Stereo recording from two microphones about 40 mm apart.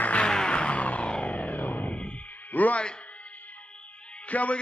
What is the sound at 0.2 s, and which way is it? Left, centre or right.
Music, left.